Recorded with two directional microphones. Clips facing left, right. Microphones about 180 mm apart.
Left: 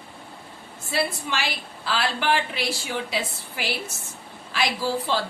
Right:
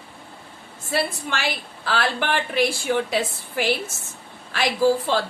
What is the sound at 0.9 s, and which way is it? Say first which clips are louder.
A woman's voice: right 1 dB; 50° right (ahead or behind).